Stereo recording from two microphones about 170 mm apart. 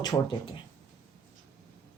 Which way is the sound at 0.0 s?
25° left (ahead or behind).